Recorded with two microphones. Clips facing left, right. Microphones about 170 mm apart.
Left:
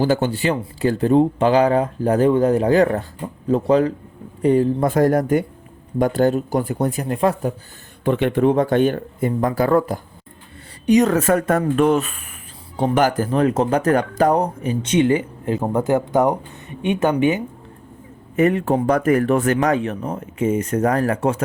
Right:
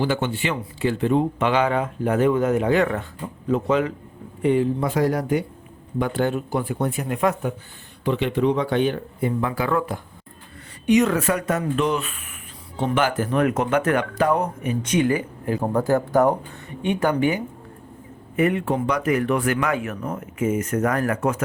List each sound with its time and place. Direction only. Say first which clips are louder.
0.0 s speech: left 5 dB; 40° left (ahead or behind)
8.0 s speech: left 4 dB; 50° left (ahead or behind); by 17.4 s 20° left (ahead or behind)
18.3 s speech: left 4 dB; 40° left (ahead or behind)